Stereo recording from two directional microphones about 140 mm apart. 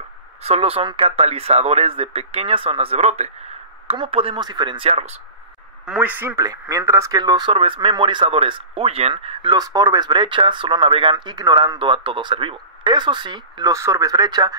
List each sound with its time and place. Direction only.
0.4 s speech: 45° right (ahead or behind)
3.9 s speech: 40° right (ahead or behind)
5.9 s speech: 10° right (ahead or behind)
7.1 s speech: 30° right (ahead or behind)